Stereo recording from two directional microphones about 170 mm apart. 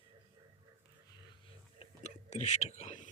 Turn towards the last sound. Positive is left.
turn(degrees=45)  # may be behind; listen again after turning